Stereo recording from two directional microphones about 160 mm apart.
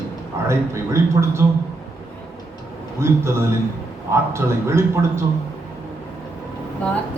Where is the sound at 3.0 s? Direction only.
15° right (ahead or behind).